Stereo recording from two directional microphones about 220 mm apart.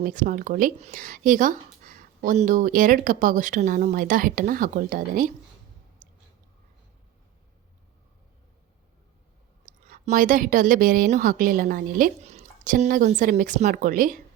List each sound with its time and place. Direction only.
0.0 s speech: 35° right (ahead or behind)
6.0 s a sound: 35° right (ahead or behind)
9.6 s speech: 40° right (ahead or behind)